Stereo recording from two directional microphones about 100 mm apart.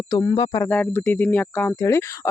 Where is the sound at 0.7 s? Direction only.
15° left (ahead or behind).